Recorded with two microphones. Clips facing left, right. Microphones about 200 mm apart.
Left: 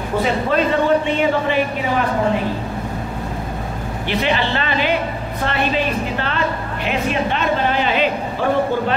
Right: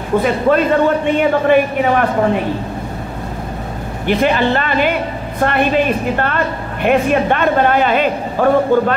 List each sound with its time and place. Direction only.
0.2 s a woman's voice: 50° right (ahead or behind)
4.1 s a woman's voice: 50° right (ahead or behind)